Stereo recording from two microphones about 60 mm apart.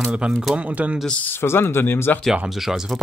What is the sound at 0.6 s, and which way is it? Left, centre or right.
Speech, right.